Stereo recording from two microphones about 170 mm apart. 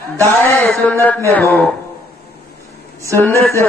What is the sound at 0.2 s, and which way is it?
A man's voice, 10° left (ahead or behind).